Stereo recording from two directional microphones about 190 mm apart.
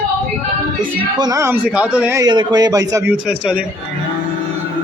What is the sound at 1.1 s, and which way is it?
A man's voice, 20° right (ahead or behind).